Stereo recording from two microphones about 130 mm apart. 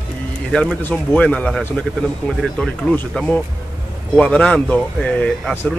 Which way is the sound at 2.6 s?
5° left (ahead or behind).